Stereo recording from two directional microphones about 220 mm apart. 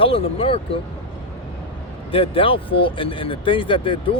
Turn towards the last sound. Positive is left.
turn(degrees=25)  # may be behind; listen again after turning